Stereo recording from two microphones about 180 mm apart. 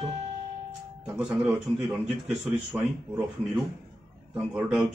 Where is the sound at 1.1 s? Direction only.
5° right (ahead or behind).